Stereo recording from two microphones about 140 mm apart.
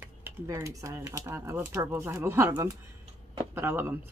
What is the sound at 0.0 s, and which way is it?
Speech, 15° right (ahead or behind).